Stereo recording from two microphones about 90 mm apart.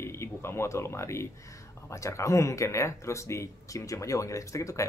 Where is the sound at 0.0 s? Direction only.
30° left (ahead or behind).